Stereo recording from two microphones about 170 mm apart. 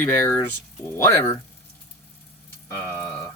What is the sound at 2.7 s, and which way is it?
Speech, 15° left (ahead or behind).